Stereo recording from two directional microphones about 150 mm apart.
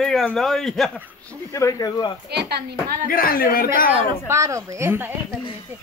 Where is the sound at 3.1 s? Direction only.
70° left (ahead or behind).